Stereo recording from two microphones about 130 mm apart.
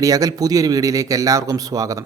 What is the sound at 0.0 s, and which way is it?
A man's voice, 25° right (ahead or behind).